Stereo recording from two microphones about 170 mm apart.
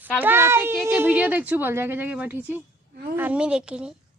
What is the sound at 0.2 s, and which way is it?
A woman's voice, 15° right (ahead or behind).